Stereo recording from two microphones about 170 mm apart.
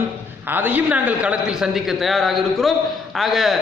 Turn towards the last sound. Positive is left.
turn(degrees=0)  # may be behind; listen again after turning